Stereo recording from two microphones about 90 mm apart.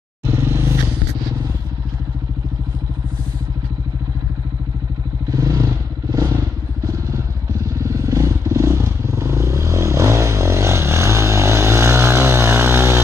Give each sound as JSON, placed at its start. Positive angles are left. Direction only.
{"t": 0.3, "sound": "vehicle", "side_deg": -25}
{"t": 5.3, "sound": "vehicle", "side_deg": -45}
{"t": 7.8, "sound": "vehicle", "side_deg": -40}